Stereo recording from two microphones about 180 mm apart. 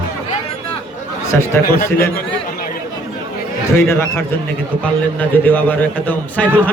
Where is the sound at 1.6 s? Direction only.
55° left (ahead or behind).